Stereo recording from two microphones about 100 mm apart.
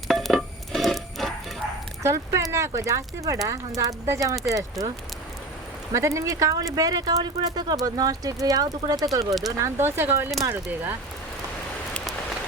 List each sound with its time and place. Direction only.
0.1 s telephone dialing: centre (ahead or behind)
2.0 s speech: 30° right (ahead or behind)
5.9 s speech: 30° right (ahead or behind)
9.6 s speech: 25° right (ahead or behind)